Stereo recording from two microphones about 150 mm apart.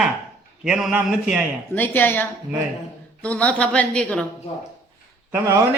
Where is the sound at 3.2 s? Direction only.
10° left (ahead or behind).